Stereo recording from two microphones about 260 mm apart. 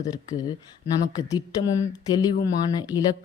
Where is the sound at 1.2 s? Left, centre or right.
Centre.